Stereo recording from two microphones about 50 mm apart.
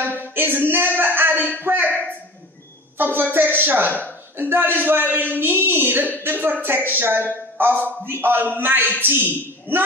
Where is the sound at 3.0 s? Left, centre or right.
Right.